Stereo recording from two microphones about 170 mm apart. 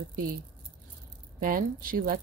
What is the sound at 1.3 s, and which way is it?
Speech, 55° right (ahead or behind).